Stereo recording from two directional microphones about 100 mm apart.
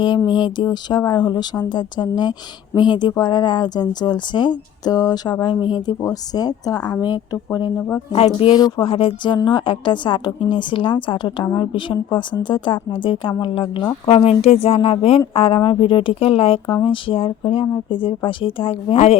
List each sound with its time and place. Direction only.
0.3 s speech: 50° left (ahead or behind)
8.8 s speech: 65° left (ahead or behind)
14.1 s speech: 85° left